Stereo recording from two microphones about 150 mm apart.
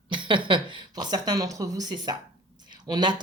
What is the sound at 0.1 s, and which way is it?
Speech, 35° right (ahead or behind).